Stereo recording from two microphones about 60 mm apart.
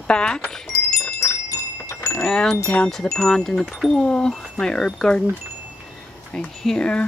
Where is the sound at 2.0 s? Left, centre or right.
Left.